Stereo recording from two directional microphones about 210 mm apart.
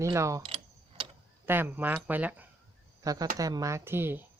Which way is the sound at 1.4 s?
10° right (ahead or behind).